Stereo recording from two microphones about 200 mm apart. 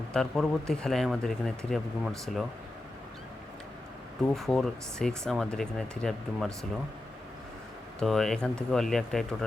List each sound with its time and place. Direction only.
0.1 s speech: centre (ahead or behind)
4.4 s speech: centre (ahead or behind)
7.9 s speech: centre (ahead or behind)